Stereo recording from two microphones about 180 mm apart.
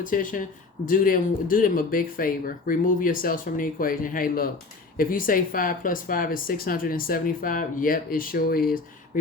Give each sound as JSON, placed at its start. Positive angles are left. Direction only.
{"t": 0.0, "sound": "speech", "side_deg": 50}